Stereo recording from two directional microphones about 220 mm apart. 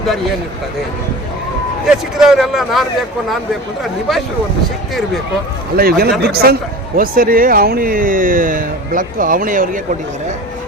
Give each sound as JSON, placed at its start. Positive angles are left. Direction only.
{"t": 1.9, "sound": "speech", "side_deg": 0}
{"t": 5.7, "sound": "speech", "side_deg": -45}